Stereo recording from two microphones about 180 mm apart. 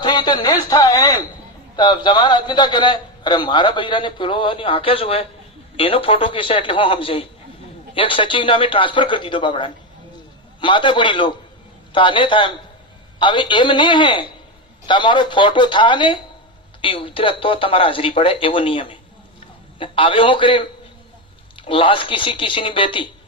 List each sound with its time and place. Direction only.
0.0 s a man's voice: 25° left (ahead or behind)